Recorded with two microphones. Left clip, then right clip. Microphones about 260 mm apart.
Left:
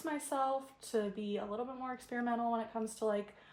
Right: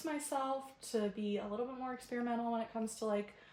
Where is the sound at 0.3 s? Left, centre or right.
Centre.